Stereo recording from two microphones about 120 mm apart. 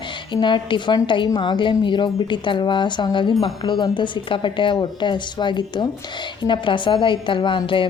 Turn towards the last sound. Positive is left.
turn(degrees=45)  # may be behind; listen again after turning